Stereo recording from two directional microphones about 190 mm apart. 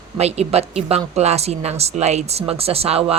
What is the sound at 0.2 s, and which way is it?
A woman's voice, 35° right (ahead or behind).